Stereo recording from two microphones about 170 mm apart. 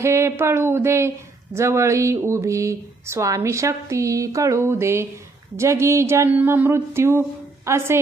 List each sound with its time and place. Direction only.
0.0 s speech: 15° right (ahead or behind)